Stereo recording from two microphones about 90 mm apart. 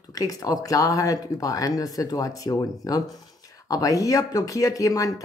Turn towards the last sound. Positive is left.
turn(degrees=40)  # may be behind; listen again after turning